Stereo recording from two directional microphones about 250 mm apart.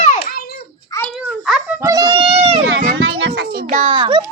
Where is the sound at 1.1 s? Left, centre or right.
Centre; by 2.6 s right.